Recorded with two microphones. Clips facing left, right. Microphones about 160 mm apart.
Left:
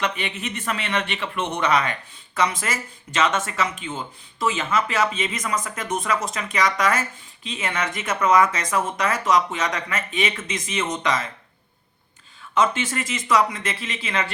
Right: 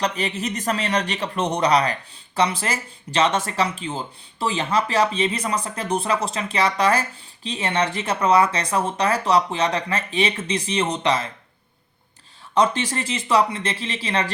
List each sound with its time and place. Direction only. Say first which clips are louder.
0.0 s a man's voice: right 3 dB; 40° right (ahead or behind)
12.5 s a man's voice: right 2 dB; 35° right (ahead or behind)